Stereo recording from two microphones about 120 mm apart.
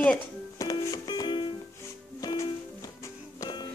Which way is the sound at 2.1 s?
30° left (ahead or behind).